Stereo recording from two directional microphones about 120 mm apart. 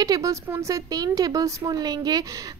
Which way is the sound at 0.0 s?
30° right (ahead or behind).